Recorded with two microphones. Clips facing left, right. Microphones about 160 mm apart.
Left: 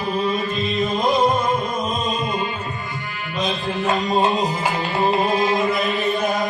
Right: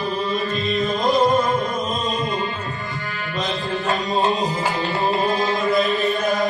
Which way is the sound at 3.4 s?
15° left (ahead or behind).